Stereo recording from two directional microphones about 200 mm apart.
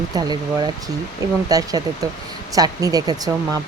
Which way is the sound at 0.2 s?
20° right (ahead or behind).